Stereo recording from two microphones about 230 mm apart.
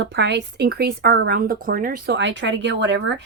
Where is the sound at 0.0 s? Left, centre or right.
Right.